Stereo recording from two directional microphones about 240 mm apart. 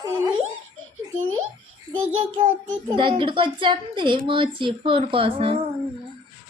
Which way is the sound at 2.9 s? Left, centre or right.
Right.